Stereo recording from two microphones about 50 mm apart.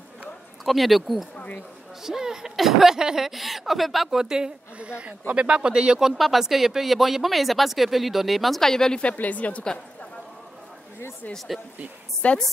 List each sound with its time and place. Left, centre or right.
0.7 s speech: centre
1.3 s a sound: left
2.0 s a woman's voice: centre
4.7 s a woman's voice: right
6.1 s speech: centre
9.0 s speech: left
11.3 s speech: centre
12.2 s speech: left